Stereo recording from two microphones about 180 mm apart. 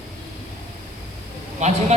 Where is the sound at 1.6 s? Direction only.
40° right (ahead or behind).